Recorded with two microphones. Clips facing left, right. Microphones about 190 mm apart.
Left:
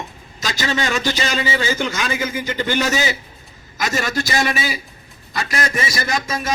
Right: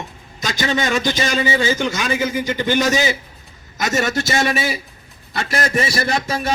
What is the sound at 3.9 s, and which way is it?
Speech, 25° right (ahead or behind).